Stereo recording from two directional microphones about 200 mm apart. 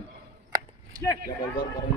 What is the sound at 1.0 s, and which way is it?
Speech, 20° left (ahead or behind).